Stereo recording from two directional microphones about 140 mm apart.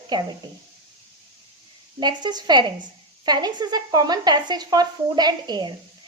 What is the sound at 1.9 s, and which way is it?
A woman's voice, 30° right (ahead or behind).